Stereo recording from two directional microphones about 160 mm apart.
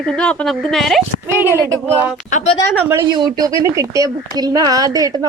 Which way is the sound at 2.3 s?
50° left (ahead or behind).